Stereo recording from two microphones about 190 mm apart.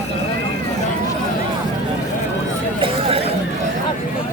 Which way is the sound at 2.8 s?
30° right (ahead or behind).